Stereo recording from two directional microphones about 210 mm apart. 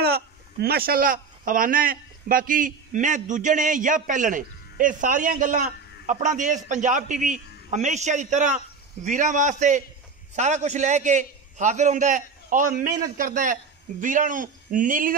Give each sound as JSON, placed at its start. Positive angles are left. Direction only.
{"t": 0.0, "sound": "a man's voice", "side_deg": -50}